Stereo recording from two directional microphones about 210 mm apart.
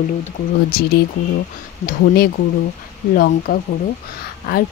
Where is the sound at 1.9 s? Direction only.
45° left (ahead or behind).